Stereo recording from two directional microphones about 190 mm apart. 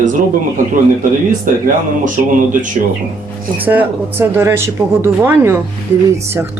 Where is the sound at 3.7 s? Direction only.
10° right (ahead or behind).